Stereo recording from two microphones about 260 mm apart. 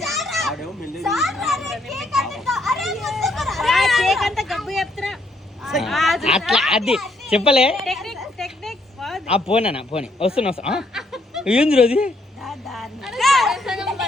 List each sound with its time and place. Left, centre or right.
0.0 s children playing: centre
5.6 s a child's voice: centre
7.3 s speech: left
7.9 s a sound: centre
9.2 s speech: left
10.7 s snicker: centre
11.8 s a sound: centre